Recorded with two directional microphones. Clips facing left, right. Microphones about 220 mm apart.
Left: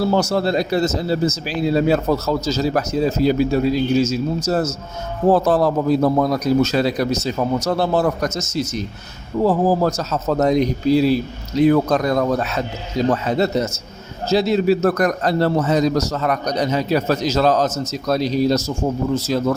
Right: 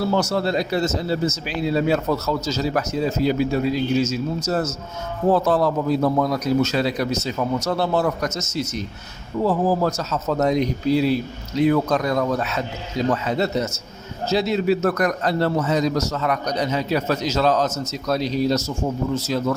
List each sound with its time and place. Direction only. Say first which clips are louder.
0.0 s a man's voice: left 3 dB; 35° left (ahead or behind)